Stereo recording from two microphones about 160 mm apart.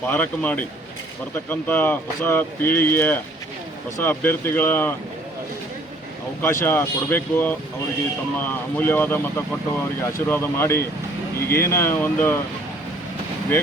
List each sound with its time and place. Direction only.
0.0 s speech: 10° left (ahead or behind)
6.4 s speech: 15° left (ahead or behind)